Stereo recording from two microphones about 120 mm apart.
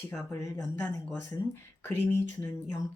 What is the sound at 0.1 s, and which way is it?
Speech, 25° left (ahead or behind).